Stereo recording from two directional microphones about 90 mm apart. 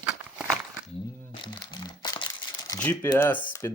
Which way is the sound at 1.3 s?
65° left (ahead or behind).